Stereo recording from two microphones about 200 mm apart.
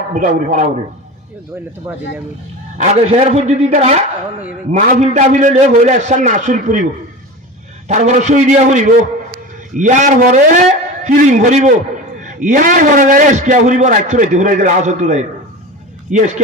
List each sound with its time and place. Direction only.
0.1 s a man's voice: 40° right (ahead or behind)
1.9 s speech: 10° right (ahead or behind)
2.7 s a man's voice: 35° right (ahead or behind)
7.9 s a man's voice: 35° right (ahead or behind)